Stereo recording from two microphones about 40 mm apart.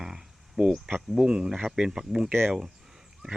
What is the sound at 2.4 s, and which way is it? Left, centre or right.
Speech, right.